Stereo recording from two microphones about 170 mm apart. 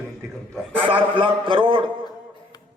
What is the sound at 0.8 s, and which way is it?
A man's voice, 30° right (ahead or behind).